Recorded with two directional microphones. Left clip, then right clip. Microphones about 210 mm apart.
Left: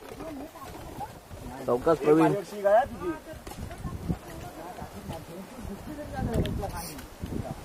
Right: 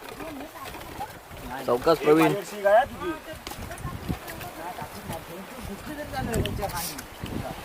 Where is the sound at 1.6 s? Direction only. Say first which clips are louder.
Right 2 dB; 20° left (ahead or behind).